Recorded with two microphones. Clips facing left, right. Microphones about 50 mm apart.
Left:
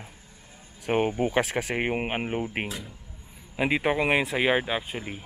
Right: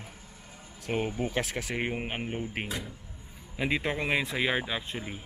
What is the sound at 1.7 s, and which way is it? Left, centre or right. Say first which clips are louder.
Speech: left 4 dB; left.